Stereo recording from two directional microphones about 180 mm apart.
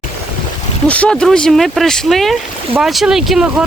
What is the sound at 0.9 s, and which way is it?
Speech, 5° left (ahead or behind).